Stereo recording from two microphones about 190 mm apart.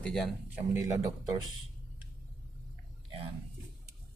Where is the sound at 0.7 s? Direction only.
15° right (ahead or behind).